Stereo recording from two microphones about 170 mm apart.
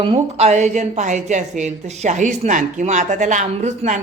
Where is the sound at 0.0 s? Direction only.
35° right (ahead or behind).